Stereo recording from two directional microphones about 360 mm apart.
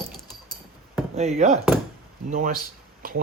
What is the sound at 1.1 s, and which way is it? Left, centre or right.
Speech, centre.